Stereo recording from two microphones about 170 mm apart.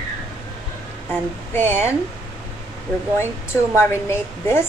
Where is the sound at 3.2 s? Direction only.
15° left (ahead or behind).